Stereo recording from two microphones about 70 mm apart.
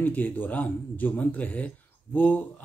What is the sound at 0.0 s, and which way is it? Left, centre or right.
Speech, left.